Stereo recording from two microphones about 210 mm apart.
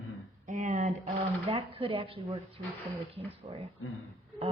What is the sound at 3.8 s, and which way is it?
Speech, 80° left.